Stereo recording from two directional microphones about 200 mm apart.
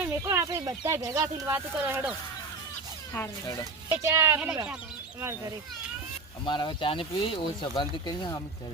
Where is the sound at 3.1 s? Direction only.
15° left (ahead or behind).